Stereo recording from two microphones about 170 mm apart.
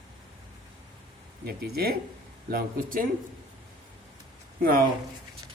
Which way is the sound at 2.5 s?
55° right (ahead or behind).